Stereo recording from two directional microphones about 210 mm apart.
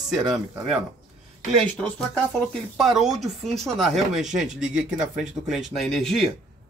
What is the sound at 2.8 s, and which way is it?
A man's voice, centre (ahead or behind).